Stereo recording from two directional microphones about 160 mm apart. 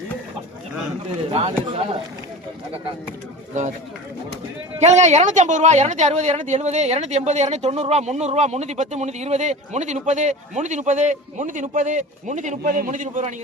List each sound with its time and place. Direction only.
1.3 s speech: 35° right (ahead or behind)
4.8 s speech: 45° right (ahead or behind)